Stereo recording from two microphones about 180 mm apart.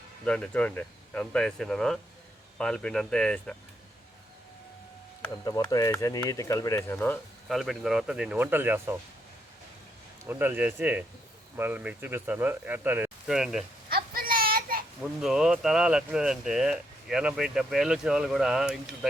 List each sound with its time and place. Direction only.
0.3 s speech: 5° left (ahead or behind)
5.9 s speech: 20° left (ahead or behind)
7.4 s speech: centre (ahead or behind)
10.2 s speech: 10° right (ahead or behind)
13.9 s a sound: 55° right (ahead or behind)
15.0 s speech: 5° right (ahead or behind)